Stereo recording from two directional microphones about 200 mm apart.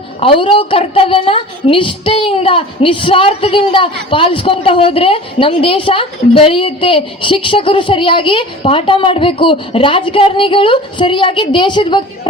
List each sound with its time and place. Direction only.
0.2 s a woman's voice: 25° left (ahead or behind)